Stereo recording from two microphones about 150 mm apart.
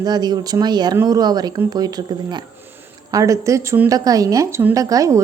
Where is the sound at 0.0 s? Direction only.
30° right (ahead or behind).